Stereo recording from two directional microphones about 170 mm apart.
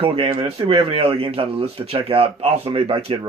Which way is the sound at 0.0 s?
30° right (ahead or behind).